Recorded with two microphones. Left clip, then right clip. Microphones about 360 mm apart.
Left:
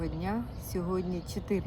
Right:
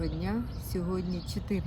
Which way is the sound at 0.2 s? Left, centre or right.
Centre.